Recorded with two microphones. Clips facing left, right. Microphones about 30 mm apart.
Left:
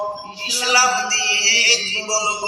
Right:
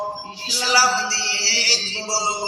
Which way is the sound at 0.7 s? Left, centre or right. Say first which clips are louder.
Left 1 dB; left.